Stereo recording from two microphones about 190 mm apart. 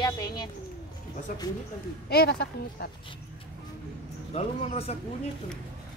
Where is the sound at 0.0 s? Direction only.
20° left (ahead or behind).